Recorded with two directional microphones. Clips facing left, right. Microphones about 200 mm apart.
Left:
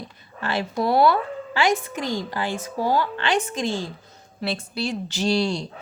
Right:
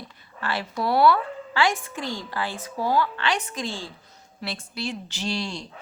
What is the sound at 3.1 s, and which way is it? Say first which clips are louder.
Speech: left 4 dB; 25° left (ahead or behind).